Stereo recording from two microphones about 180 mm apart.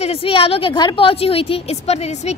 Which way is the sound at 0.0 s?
30° left (ahead or behind).